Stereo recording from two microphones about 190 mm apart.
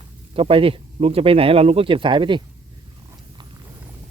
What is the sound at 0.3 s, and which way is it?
Speech, 30° right (ahead or behind).